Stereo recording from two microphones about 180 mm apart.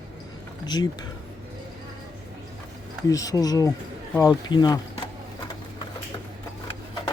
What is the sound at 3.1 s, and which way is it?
Speech, 20° left (ahead or behind).